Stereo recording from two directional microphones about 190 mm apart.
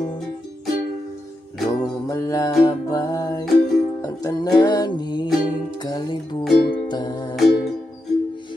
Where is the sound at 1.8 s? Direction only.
15° left (ahead or behind).